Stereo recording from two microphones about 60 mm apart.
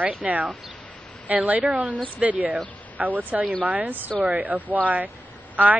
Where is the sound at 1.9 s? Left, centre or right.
Left.